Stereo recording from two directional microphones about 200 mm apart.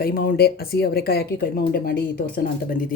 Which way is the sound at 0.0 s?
45° left (ahead or behind).